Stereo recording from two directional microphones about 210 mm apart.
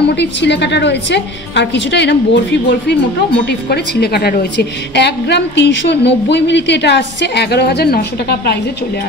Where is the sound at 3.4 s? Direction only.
50° left (ahead or behind).